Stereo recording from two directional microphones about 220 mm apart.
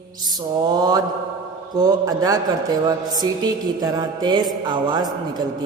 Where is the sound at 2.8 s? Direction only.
15° right (ahead or behind).